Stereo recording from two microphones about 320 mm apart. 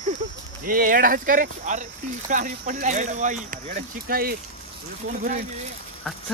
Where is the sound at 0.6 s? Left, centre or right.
Right.